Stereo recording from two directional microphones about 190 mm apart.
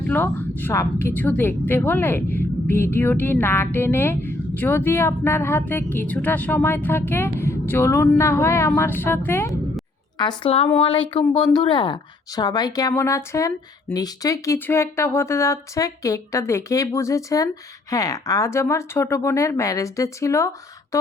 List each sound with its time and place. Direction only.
0.1 s a woman's voice: 10° left (ahead or behind)
10.2 s a woman's voice: 25° left (ahead or behind)